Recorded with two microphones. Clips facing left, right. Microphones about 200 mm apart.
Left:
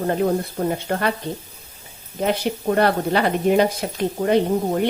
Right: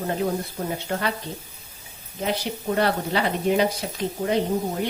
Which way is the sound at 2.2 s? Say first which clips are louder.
Left 5 dB; 55° left (ahead or behind).